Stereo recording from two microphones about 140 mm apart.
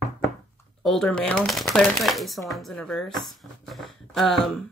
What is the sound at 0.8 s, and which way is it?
Speech, 5° left (ahead or behind).